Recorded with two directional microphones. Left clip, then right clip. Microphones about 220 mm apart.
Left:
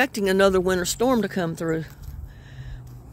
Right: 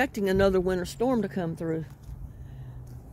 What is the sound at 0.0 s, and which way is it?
Speech, 15° left (ahead or behind).